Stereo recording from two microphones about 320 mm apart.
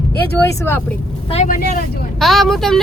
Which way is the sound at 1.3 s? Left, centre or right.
Left.